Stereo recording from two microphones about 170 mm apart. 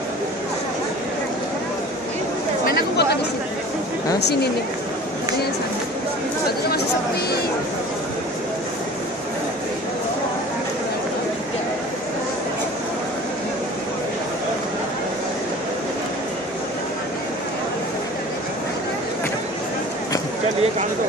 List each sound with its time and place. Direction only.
2.6 s speech: 70° left (ahead or behind)